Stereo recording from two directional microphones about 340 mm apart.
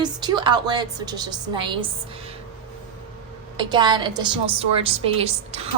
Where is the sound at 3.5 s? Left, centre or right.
Centre.